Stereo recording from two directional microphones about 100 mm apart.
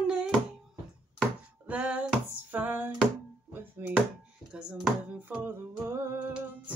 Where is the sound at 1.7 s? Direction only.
15° right (ahead or behind).